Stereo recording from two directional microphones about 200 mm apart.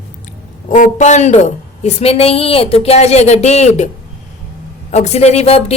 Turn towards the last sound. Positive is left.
turn(degrees=30)  # may be behind; listen again after turning